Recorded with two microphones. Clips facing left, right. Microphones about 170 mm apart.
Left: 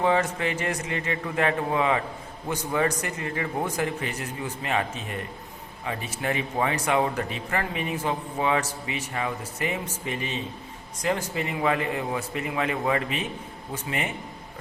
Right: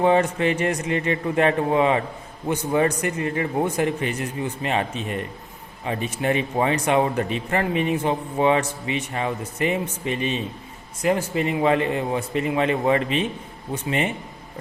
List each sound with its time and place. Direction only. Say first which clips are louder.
0.0 s speech: right 5 dB; 25° right (ahead or behind)